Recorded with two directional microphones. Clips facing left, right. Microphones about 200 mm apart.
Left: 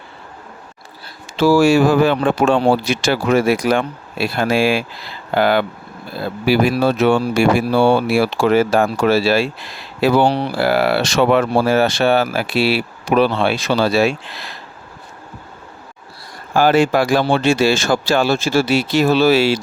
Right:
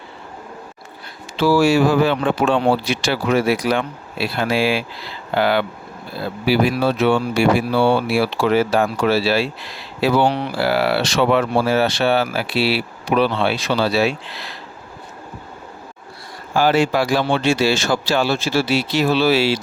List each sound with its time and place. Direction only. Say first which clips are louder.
1.4 s speech: left 3 dB; 45° left (ahead or behind)
10.2 s speech: left 2 dB; 35° left (ahead or behind)
10.6 s speech: left 2 dB; 50° left (ahead or behind)
16.6 s speech: left 3 dB; 50° left (ahead or behind)